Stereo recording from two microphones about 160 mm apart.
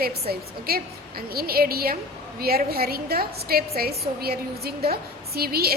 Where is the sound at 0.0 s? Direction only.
75° right (ahead or behind).